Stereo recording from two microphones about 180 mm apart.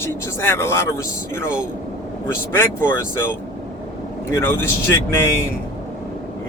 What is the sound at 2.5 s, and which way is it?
Speech, 15° left (ahead or behind).